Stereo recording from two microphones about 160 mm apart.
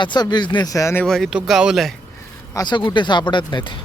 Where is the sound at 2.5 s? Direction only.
25° left (ahead or behind).